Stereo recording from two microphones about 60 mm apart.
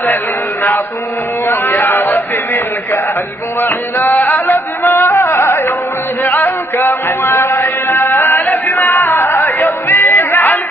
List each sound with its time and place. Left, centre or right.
1.5 s speech: left
3.6 s a sound: left
6.2 s music: left